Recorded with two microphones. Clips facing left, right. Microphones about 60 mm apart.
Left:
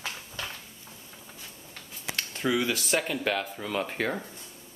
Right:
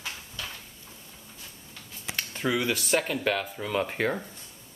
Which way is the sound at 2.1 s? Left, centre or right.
Centre.